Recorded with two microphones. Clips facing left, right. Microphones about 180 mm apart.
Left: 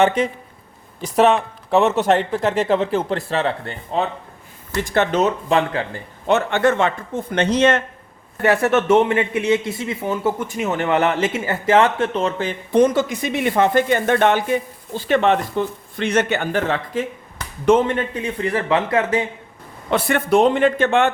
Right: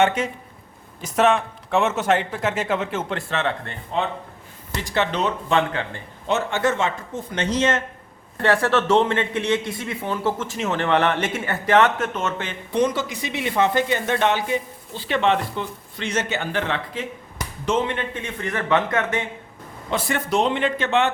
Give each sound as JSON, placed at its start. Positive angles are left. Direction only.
{"t": 1.0, "sound": "speech", "side_deg": 35}
{"t": 4.8, "sound": "speech", "side_deg": 50}
{"t": 6.2, "sound": "a man's voice", "side_deg": 60}
{"t": 8.4, "sound": "speech", "side_deg": 20}
{"t": 12.7, "sound": "speech", "side_deg": 50}
{"t": 19.9, "sound": "speech", "side_deg": 60}